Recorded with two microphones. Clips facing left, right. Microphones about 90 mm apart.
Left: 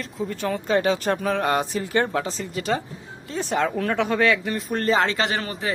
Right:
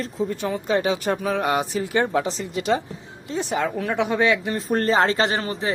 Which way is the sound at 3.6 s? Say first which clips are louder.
Left 2 dB; 5° right (ahead or behind).